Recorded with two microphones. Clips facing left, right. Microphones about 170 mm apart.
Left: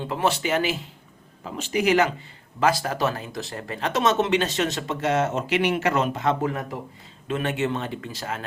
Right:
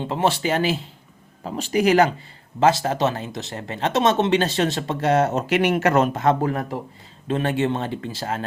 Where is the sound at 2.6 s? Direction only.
25° right (ahead or behind).